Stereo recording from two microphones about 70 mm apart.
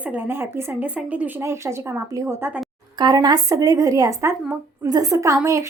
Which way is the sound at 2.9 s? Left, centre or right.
Right.